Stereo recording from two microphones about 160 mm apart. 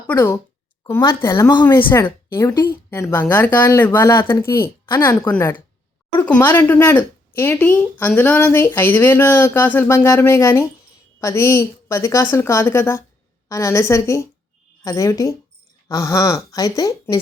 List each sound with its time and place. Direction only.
0.1 s a woman's voice: 15° left (ahead or behind)
2.9 s a woman's voice: 10° left (ahead or behind)